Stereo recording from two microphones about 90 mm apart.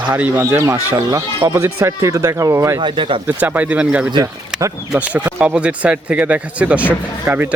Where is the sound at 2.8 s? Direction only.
65° right (ahead or behind).